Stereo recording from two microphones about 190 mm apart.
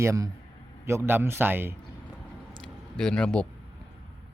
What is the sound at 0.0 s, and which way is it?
Speech, 15° right (ahead or behind).